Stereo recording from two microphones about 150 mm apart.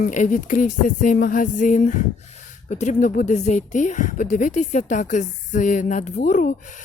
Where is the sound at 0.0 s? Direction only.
55° left (ahead or behind).